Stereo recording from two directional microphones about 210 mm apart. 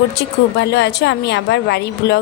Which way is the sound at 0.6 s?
55° left (ahead or behind).